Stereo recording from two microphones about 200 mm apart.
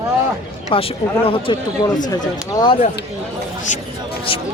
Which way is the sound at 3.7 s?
40° left (ahead or behind).